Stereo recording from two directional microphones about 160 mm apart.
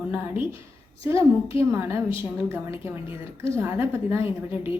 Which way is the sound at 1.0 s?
15° right (ahead or behind).